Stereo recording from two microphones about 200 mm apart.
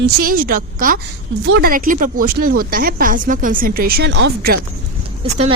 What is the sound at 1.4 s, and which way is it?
Speech, 60° right (ahead or behind).